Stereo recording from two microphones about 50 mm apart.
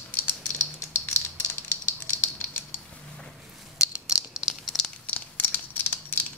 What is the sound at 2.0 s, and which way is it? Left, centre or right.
Rattle, left.